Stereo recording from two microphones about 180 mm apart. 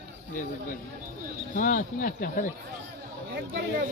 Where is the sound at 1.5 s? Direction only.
50° left (ahead or behind).